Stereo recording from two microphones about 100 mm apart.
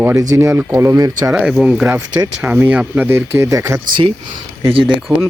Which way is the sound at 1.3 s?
10° right (ahead or behind).